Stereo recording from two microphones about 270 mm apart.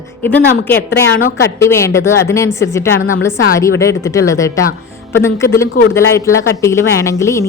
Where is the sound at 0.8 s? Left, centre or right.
Left.